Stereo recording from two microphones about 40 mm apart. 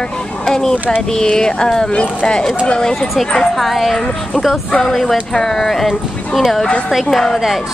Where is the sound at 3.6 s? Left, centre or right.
Centre.